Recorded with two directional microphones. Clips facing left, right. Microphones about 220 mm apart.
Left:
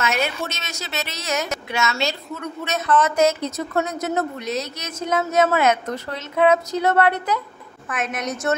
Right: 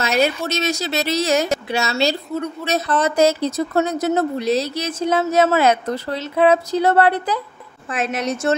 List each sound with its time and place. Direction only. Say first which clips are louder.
0.0 s a woman's voice: right 5 dB; 35° right (ahead or behind)